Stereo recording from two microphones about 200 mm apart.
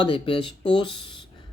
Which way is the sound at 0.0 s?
25° left (ahead or behind).